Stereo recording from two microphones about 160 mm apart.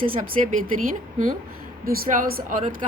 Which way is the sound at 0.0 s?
60° right (ahead or behind).